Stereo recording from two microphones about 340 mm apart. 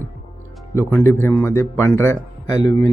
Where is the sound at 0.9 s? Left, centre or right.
Centre.